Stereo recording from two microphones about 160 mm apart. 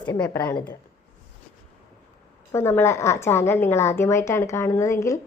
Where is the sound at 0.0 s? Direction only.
25° left (ahead or behind).